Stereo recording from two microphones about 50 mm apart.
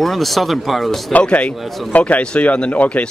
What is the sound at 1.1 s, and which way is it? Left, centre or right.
Speech, left.